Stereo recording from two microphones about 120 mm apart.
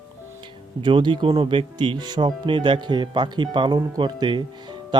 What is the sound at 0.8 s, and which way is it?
Speech, 45° right (ahead or behind).